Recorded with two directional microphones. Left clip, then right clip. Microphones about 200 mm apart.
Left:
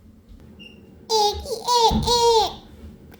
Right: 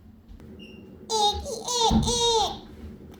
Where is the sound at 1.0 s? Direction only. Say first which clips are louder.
Left 4 dB; 40° left (ahead or behind).